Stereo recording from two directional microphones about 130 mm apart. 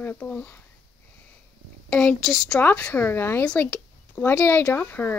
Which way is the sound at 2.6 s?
10° left (ahead or behind).